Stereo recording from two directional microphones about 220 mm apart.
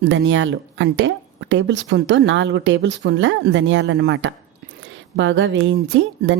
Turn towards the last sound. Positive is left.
turn(degrees=-55)  # may be behind; listen again after turning